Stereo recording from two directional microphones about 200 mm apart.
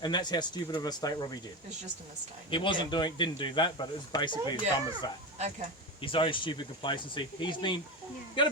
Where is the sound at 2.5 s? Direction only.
25° left (ahead or behind).